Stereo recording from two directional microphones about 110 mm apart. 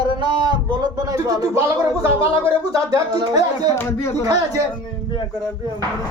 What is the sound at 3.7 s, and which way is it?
Speech, 25° left (ahead or behind).